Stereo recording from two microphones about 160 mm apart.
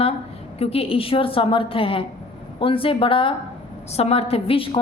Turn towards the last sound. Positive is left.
turn(degrees=35)  # may be behind; listen again after turning